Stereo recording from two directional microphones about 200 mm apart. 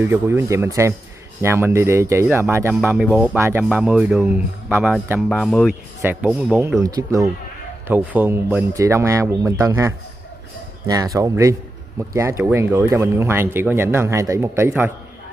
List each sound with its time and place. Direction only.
0.0 s speech: 10° right (ahead or behind)
5.3 s speech: 5° left (ahead or behind)
5.9 s speech: 10° right (ahead or behind)